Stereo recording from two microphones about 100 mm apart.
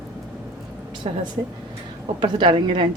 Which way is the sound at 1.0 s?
80° right.